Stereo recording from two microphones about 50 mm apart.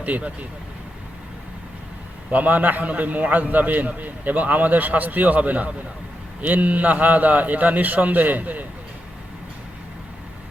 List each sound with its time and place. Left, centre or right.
0.0 s speech: right
2.3 s a man's voice: right